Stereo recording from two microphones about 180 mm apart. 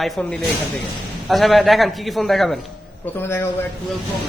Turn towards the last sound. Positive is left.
turn(degrees=15)  # may be behind; listen again after turning